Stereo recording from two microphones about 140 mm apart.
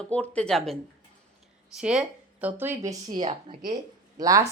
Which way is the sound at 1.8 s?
5° right (ahead or behind).